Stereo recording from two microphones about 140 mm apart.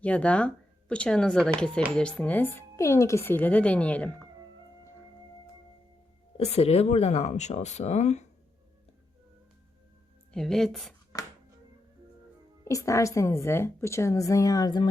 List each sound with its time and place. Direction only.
0.0 s speech: 10° left (ahead or behind)
6.3 s speech: 45° left (ahead or behind)
10.3 s a woman's voice: 5° left (ahead or behind)
12.6 s a woman's voice: 20° left (ahead or behind)